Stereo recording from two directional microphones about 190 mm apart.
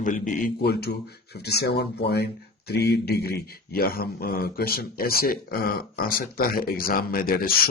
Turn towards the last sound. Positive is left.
turn(degrees=50)  # may be behind; listen again after turning